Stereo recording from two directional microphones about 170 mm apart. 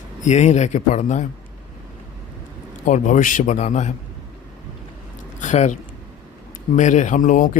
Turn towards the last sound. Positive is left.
turn(degrees=50)  # may be behind; listen again after turning